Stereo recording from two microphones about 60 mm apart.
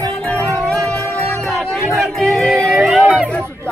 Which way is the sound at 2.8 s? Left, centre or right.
Centre.